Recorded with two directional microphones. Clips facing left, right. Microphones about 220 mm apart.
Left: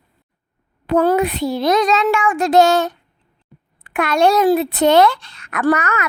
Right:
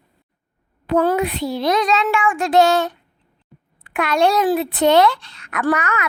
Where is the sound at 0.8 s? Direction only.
45° left (ahead or behind).